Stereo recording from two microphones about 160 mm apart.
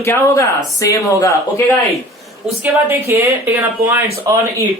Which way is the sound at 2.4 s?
10° right (ahead or behind).